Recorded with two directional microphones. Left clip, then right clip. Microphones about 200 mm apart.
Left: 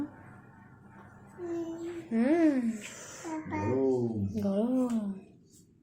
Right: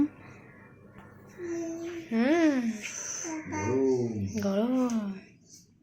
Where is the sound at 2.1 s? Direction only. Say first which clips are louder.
Right 1 dB; 5° left (ahead or behind).